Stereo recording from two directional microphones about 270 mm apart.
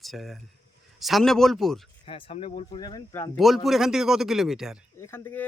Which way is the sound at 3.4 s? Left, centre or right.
Centre.